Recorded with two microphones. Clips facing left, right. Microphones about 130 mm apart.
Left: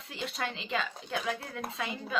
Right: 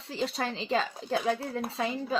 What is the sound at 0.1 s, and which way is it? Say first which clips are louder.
A woman's voice: right 5 dB; 35° right (ahead or behind).